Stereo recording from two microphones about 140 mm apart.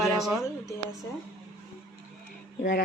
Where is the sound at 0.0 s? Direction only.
Centre (ahead or behind).